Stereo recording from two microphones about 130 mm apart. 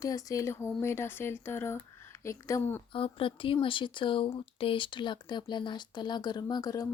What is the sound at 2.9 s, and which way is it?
Speech, 45° left (ahead or behind).